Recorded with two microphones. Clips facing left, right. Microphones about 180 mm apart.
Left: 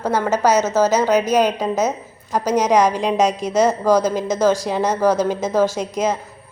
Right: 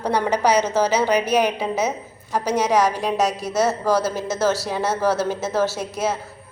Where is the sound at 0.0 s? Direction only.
15° right (ahead or behind).